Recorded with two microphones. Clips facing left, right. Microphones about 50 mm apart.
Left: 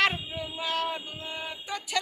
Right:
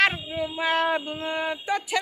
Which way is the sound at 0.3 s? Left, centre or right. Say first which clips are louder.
Right 7 dB; right.